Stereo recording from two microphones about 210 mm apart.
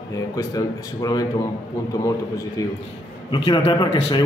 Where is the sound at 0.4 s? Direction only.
15° left (ahead or behind).